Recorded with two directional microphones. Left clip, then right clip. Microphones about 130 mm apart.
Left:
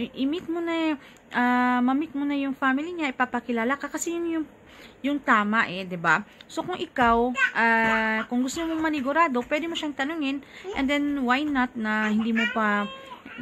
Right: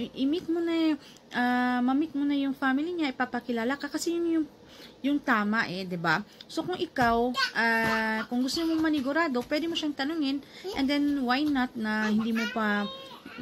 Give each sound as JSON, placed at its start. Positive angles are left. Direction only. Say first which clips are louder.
{"t": 0.0, "sound": "speech", "louder": "left 1 dB", "side_deg": 30}